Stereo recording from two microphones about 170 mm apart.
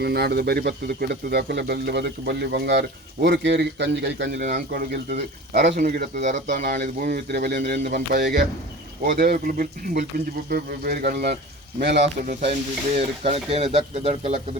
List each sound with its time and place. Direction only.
0.0 s speech: 70° right (ahead or behind); by 4.4 s 90° right
4.5 s speech: 75° right (ahead or behind)
5.8 s speech: 65° right (ahead or behind)
6.2 s speech: 45° right (ahead or behind)
6.6 s speech: 75° right (ahead or behind)
6.8 s speech: 60° right (ahead or behind)
11.8 s speech: 90° right
13.0 s speech: 40° right (ahead or behind)